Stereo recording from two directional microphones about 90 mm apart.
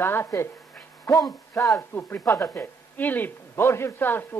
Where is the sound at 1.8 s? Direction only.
25° left (ahead or behind).